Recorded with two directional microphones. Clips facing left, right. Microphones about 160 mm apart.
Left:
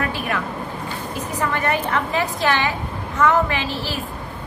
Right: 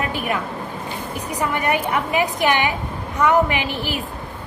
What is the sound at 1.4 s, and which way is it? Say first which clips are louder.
A woman's voice: right 1 dB; 15° right (ahead or behind).